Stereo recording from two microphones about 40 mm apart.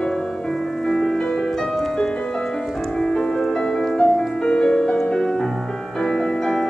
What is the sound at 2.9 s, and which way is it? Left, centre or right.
Music, centre.